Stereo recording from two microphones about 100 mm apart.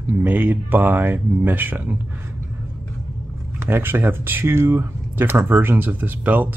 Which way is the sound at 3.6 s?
25° right (ahead or behind).